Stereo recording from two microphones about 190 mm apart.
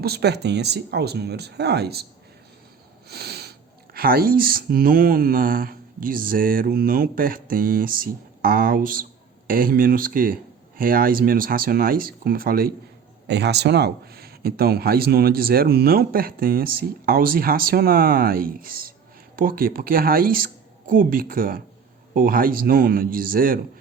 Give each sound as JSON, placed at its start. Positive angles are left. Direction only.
{"t": 0.0, "sound": "speech", "side_deg": -60}
{"t": 3.1, "sound": "snort", "side_deg": -60}
{"t": 3.9, "sound": "speech", "side_deg": -50}
{"t": 13.2, "sound": "speech", "side_deg": -60}